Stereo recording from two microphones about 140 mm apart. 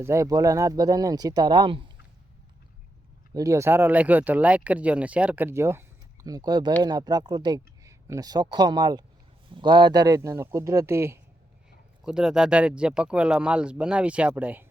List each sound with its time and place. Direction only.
0.0 s speech: 20° right (ahead or behind); by 1.9 s 35° right (ahead or behind)
3.3 s speech: 20° right (ahead or behind)
12.0 s speech: 5° right (ahead or behind)